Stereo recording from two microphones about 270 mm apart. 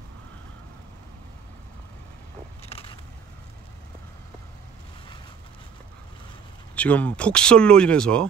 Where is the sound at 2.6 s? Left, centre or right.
Left.